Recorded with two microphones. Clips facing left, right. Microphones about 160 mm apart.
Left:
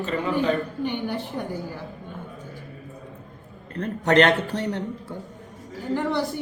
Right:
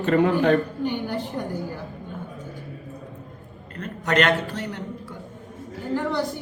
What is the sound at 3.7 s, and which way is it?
Speech, 30° left (ahead or behind).